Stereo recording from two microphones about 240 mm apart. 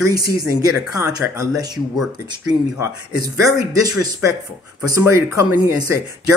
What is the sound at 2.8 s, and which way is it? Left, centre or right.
Speech, centre.